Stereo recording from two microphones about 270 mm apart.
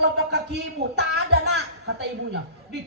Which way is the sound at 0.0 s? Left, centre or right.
Right.